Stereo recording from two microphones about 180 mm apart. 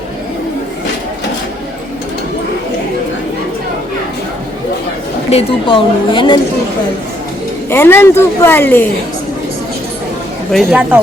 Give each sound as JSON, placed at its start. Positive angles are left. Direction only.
{"t": 5.3, "sound": "a woman's voice", "side_deg": 30}
{"t": 7.7, "sound": "a woman's voice", "side_deg": 15}
{"t": 10.5, "sound": "a woman's voice", "side_deg": 0}